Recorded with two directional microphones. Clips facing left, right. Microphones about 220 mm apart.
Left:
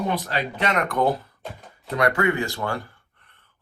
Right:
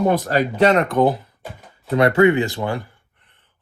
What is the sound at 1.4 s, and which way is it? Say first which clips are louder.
Speech: right 1 dB; 5° right (ahead or behind).